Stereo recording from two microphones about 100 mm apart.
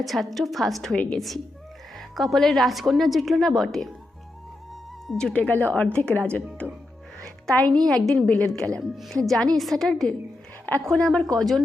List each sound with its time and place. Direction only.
0.0 s a woman's voice: centre (ahead or behind)
5.0 s speech: 10° left (ahead or behind)
7.7 s a woman's voice: 5° left (ahead or behind)
8.8 s a woman's voice: 5° right (ahead or behind)